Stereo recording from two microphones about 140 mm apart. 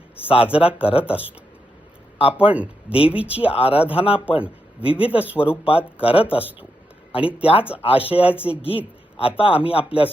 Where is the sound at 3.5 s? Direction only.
45° left (ahead or behind).